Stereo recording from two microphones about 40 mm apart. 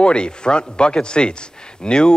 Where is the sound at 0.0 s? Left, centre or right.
Left.